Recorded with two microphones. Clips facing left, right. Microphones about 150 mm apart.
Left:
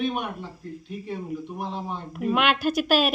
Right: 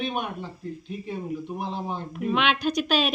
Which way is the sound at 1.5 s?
Centre (ahead or behind).